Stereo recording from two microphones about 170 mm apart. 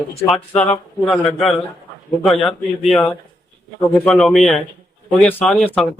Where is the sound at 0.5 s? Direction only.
40° left (ahead or behind).